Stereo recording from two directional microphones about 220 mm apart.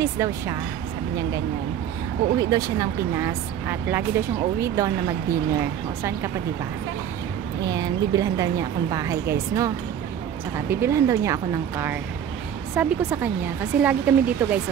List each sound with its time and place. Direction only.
0.0 s speech: 10° right (ahead or behind)
2.3 s speech: 15° right (ahead or behind)
7.6 s speech: 15° right (ahead or behind)
10.7 s speech: 10° right (ahead or behind)